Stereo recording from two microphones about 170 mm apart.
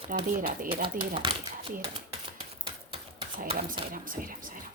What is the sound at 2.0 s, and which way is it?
Typewriter, 35° right (ahead or behind).